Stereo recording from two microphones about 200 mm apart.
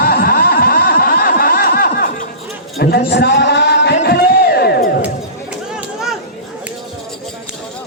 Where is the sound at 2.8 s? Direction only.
55° left (ahead or behind).